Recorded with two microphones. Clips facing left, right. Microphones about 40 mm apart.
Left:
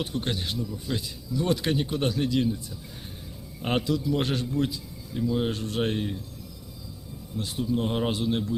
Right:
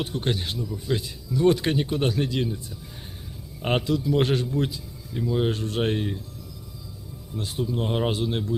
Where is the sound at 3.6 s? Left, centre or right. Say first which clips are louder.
Right 2 dB; right.